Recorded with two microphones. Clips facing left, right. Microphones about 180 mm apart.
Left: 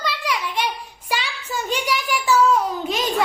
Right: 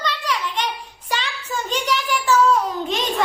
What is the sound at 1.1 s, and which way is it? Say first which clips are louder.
Child singing: even; 10° left (ahead or behind).